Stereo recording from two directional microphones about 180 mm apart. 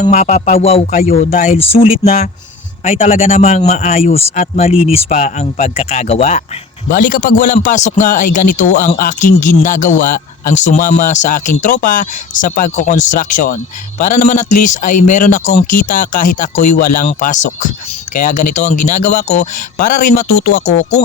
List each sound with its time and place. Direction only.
0.0 s a man's voice: 40° left (ahead or behind)
0.9 s a man's voice: 50° left (ahead or behind)
1.3 s speech: 40° left (ahead or behind)
6.9 s a man's voice: 50° left (ahead or behind)